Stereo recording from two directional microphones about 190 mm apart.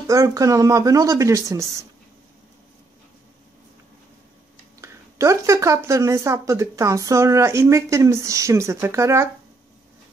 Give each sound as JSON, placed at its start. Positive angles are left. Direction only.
{"t": 0.0, "sound": "speech", "side_deg": -15}
{"t": 4.8, "sound": "speech", "side_deg": -15}